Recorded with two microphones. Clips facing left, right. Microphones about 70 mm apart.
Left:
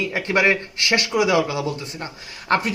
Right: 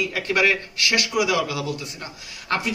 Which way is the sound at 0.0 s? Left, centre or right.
Left.